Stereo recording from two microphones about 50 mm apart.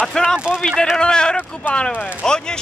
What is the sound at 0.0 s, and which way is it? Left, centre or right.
Speech, centre.